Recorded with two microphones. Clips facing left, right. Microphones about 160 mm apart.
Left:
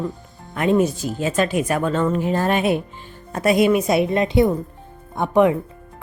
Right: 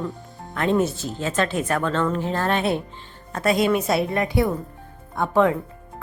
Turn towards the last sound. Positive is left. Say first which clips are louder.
# left 3 dB
turn(degrees=15)  # may be behind; listen again after turning